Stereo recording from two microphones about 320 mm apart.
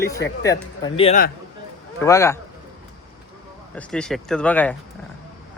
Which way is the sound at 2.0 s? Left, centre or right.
Centre.